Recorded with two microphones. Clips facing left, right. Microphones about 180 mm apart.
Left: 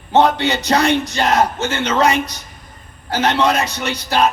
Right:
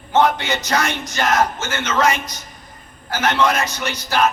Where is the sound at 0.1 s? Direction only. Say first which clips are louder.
Left 3 dB; 35° left (ahead or behind).